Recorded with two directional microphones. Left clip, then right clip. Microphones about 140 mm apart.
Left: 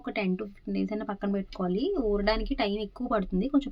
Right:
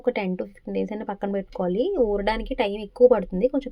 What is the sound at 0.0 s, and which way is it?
Speech, 35° right (ahead or behind).